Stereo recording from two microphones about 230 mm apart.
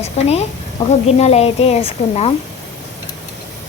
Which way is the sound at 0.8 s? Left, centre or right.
Centre.